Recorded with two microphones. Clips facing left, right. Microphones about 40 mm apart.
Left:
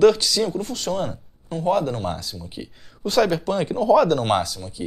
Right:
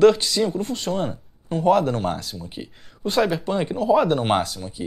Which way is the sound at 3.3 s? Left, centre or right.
Right.